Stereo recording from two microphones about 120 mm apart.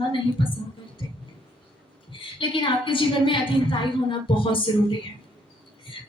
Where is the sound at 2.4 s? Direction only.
45° left (ahead or behind).